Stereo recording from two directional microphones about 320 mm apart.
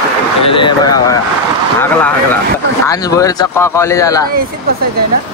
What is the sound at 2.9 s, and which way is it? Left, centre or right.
Speech, centre.